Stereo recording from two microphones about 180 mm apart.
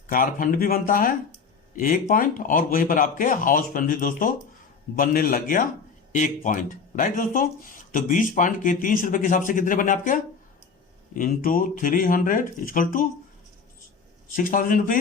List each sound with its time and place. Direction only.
0.1 s speech: 50° left (ahead or behind)
14.3 s speech: 50° left (ahead or behind)